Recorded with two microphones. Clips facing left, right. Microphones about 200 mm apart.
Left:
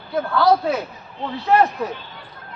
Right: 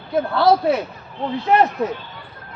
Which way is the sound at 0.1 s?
25° right (ahead or behind).